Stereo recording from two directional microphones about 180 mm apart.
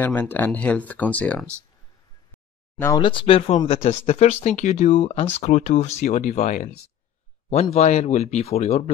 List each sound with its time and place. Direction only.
0.0 s speech: 10° left (ahead or behind)
3.0 s speech: 25° left (ahead or behind)